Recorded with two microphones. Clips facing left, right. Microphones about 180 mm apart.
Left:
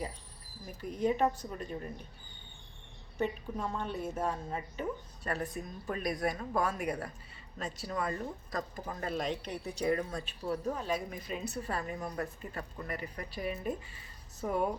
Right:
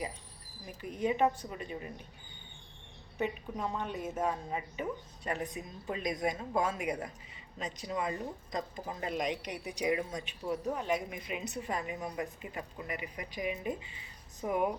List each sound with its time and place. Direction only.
0.8 s speech: 10° right (ahead or behind)
3.2 s speech: 15° right (ahead or behind)